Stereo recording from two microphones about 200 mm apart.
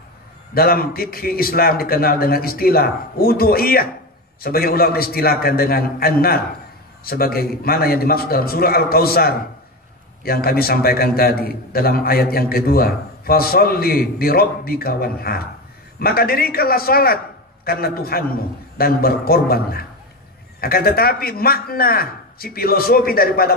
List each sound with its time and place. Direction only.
0.6 s a man's voice: 50° left (ahead or behind)